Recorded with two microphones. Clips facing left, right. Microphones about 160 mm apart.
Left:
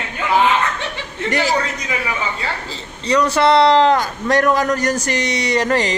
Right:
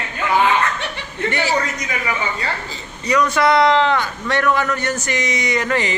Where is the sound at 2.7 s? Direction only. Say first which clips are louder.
Left 3 dB; 30° left (ahead or behind).